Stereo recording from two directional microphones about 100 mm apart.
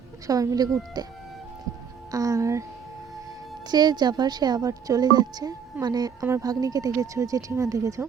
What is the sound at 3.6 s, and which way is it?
A woman's voice, 45° right (ahead or behind).